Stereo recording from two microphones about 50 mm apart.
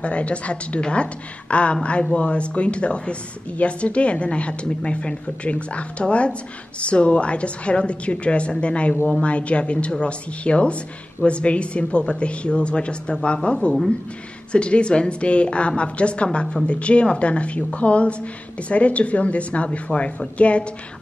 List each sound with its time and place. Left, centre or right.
0.0 s speech: left